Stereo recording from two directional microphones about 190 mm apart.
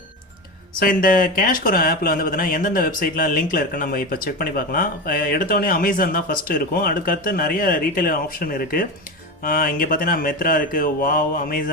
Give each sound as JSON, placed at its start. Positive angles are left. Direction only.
{"t": 0.8, "sound": "speech", "side_deg": 45}